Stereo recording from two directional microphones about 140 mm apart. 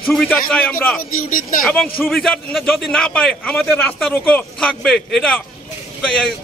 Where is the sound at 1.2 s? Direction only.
75° left (ahead or behind).